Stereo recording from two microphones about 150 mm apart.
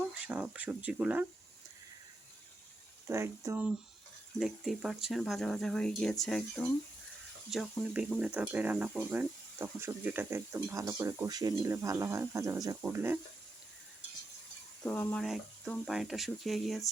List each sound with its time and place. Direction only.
0.1 s speech: 10° right (ahead or behind)
3.1 s speech: 15° right (ahead or behind)
4.4 s speech: centre (ahead or behind)
14.8 s speech: 10° left (ahead or behind)